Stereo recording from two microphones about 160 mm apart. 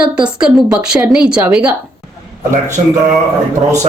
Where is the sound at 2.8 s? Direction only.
50° right (ahead or behind).